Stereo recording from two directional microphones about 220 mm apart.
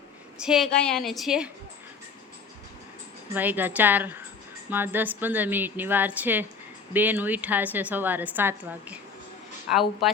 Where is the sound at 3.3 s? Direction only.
10° right (ahead or behind).